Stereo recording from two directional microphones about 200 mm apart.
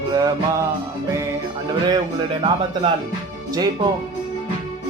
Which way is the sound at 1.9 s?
20° right (ahead or behind).